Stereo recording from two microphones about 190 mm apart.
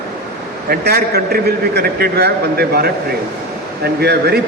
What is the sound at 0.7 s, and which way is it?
A man's voice, 55° right (ahead or behind).